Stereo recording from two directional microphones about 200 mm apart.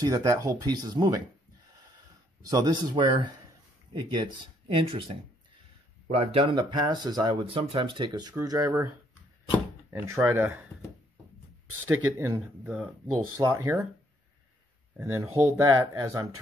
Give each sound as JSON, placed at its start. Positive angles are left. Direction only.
{"t": 0.0, "sound": "speech", "side_deg": -15}
{"t": 2.4, "sound": "speech", "side_deg": -20}
{"t": 4.7, "sound": "speech", "side_deg": -25}
{"t": 9.9, "sound": "speech", "side_deg": -15}
{"t": 12.1, "sound": "speech", "side_deg": -10}
{"t": 15.0, "sound": "speech", "side_deg": -15}